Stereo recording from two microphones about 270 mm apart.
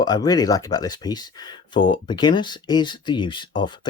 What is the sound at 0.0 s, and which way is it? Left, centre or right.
Speech, centre.